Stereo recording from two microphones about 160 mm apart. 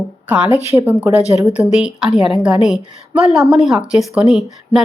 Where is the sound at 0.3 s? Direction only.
10° right (ahead or behind).